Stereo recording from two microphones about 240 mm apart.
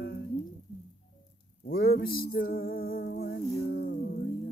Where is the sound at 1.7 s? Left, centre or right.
Left.